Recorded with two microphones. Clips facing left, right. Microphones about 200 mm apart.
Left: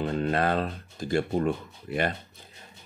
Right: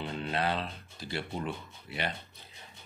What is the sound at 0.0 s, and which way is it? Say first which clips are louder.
Speech: left 7 dB; 45° left (ahead or behind).